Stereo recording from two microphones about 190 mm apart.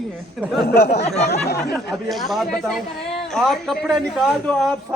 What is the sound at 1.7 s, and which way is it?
Speech, centre (ahead or behind).